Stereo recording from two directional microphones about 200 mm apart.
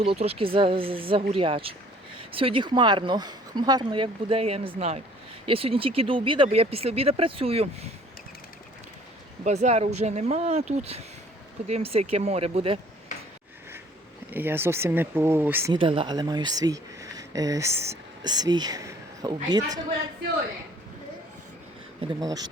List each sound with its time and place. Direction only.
0.0 s speech: 30° right (ahead or behind)
9.4 s speech: 35° right (ahead or behind)
14.3 s speech: 10° right (ahead or behind)
15.7 s speech: 25° right (ahead or behind)
22.0 s speech: 20° right (ahead or behind)